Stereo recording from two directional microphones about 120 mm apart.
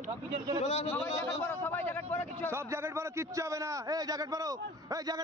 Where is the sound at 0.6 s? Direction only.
65° left (ahead or behind).